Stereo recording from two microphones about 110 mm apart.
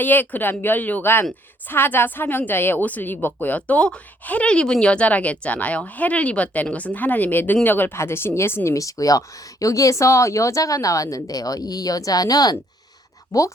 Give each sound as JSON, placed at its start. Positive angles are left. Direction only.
{"t": 0.0, "sound": "speech", "side_deg": 15}